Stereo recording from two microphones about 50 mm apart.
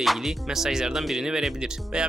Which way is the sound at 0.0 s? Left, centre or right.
Centre.